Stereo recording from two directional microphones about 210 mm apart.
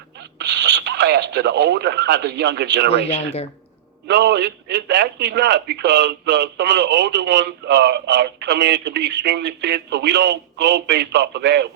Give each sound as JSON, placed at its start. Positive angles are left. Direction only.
{"t": 0.2, "sound": "speech", "side_deg": -55}
{"t": 3.1, "sound": "speech", "side_deg": 30}
{"t": 4.0, "sound": "a man's voice", "side_deg": -55}